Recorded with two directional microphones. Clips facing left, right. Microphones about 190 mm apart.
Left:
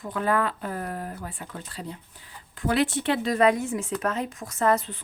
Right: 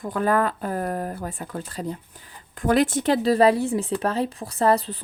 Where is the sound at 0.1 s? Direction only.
40° right (ahead or behind).